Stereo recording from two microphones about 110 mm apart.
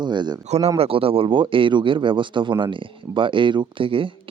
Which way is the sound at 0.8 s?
60° right (ahead or behind).